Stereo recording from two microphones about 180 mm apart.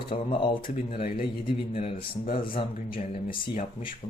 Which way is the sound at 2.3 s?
30° left (ahead or behind).